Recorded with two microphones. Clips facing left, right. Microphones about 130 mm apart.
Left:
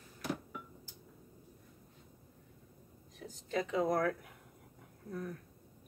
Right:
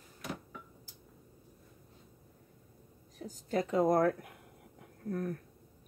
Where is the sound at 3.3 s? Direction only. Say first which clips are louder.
Right 3 dB; 40° right (ahead or behind).